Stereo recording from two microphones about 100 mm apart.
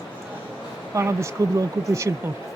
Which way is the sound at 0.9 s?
30° right (ahead or behind).